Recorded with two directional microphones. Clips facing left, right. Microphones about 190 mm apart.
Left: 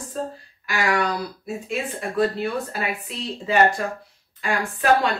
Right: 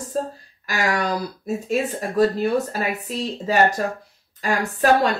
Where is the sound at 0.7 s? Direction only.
40° right (ahead or behind).